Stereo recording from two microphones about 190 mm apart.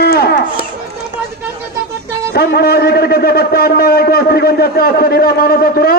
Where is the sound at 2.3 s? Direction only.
55° left (ahead or behind).